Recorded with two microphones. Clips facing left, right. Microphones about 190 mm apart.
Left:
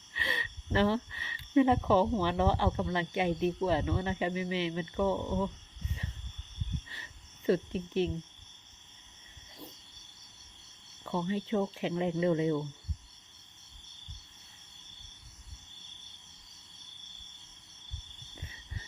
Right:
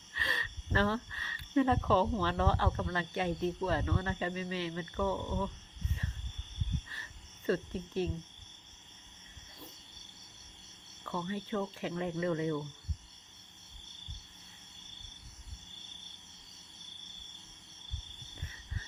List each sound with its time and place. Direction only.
0.1 s speech: 15° left (ahead or behind)
6.9 s cricket: 15° left (ahead or behind)
11.0 s speech: 20° left (ahead or behind)